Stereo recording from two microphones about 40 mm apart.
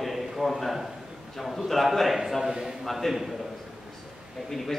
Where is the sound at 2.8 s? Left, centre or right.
Centre.